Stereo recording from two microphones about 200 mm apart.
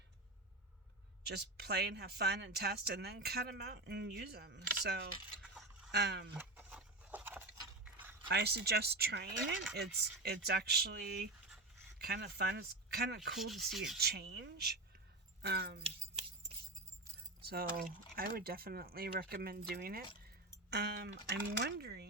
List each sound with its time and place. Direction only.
1.2 s speech: 55° right (ahead or behind)
5.4 s a sound: 5° right (ahead or behind)
5.9 s speech: 55° right (ahead or behind)
6.3 s a sound: 10° right (ahead or behind)
8.3 s speech: 55° right (ahead or behind)
13.4 s speech: centre (ahead or behind)
14.0 s speech: 55° right (ahead or behind)
17.4 s speech: 50° right (ahead or behind)